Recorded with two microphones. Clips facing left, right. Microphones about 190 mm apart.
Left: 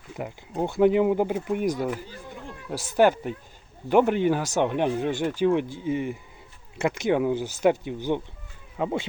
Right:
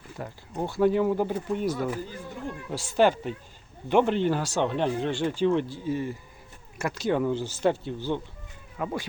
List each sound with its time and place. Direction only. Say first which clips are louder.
0.2 s speech: left 4 dB; 15° left (ahead or behind)